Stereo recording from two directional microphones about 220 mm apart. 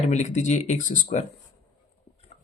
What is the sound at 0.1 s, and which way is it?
Speech, 30° left (ahead or behind).